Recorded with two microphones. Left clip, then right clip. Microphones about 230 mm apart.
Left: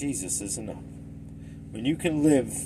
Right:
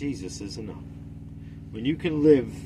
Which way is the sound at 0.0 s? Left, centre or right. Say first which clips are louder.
Left 1 dB; centre.